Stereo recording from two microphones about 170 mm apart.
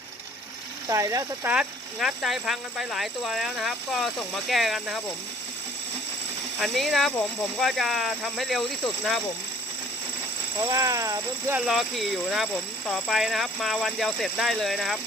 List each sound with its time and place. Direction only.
0.9 s speech: 20° right (ahead or behind)
1.5 s speech: centre (ahead or behind)
6.6 s speech: centre (ahead or behind)
10.7 s speech: 20° right (ahead or behind)
11.5 s speech: centre (ahead or behind)